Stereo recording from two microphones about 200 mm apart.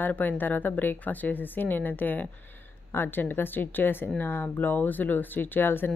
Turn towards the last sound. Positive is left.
turn(degrees=10)  # may be behind; listen again after turning